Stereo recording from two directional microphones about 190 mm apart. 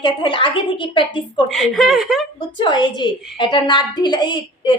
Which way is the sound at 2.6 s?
25° left (ahead or behind).